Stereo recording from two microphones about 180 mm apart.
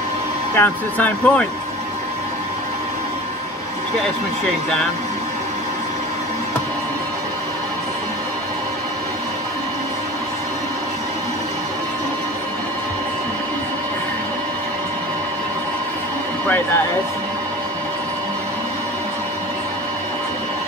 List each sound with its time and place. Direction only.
0.6 s speech: 10° left (ahead or behind)
16.4 s speech: 10° left (ahead or behind)